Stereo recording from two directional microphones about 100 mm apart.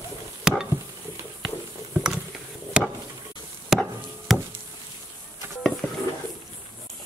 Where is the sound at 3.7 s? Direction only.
Centre (ahead or behind).